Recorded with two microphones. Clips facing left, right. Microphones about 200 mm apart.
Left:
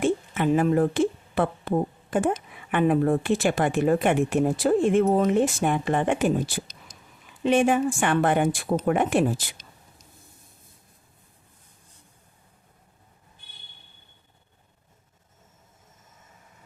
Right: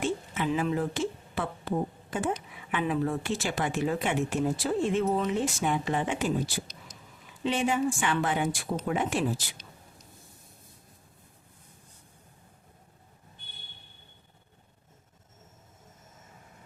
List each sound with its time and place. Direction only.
0.0 s a woman's voice: 55° left (ahead or behind)